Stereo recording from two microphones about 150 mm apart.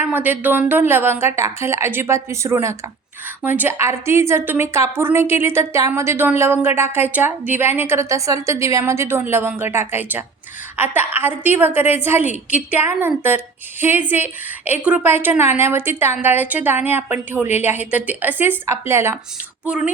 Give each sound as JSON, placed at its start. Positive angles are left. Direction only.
{"t": 0.0, "sound": "a woman's voice", "side_deg": -10}